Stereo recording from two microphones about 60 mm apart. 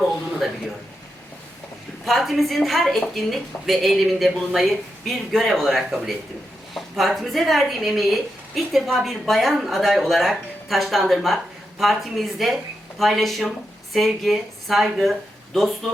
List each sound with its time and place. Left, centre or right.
2.0 s a woman's voice: centre